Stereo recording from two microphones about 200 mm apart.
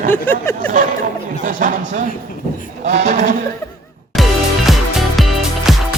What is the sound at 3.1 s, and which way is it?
Speech, 40° right (ahead or behind).